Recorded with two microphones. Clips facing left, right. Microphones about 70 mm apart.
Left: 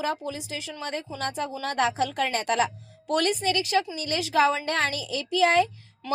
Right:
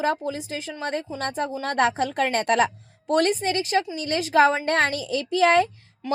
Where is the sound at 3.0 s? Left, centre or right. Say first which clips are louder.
Right 3 dB; right.